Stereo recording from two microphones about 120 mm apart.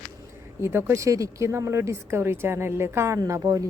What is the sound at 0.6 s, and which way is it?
Speech, 20° right (ahead or behind).